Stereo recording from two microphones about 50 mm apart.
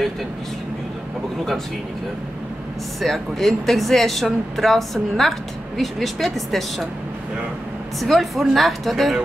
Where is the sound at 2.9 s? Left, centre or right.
Centre.